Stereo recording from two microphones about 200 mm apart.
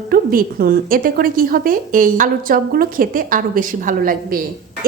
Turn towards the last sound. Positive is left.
turn(degrees=-45)  # may be behind; listen again after turning